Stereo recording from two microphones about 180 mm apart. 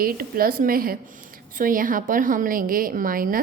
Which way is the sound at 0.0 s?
55° right (ahead or behind).